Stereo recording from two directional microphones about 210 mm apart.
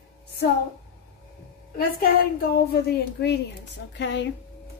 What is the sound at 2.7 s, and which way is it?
A woman's voice, 50° left (ahead or behind).